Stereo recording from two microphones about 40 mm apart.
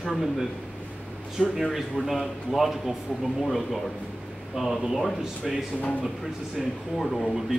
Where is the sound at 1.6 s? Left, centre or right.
Centre.